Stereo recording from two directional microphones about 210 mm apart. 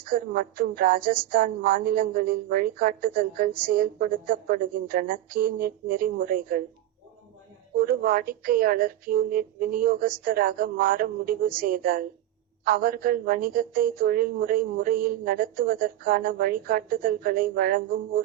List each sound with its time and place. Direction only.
0.0 s a woman's voice: 40° right (ahead or behind)
7.8 s a woman's voice: 45° right (ahead or behind)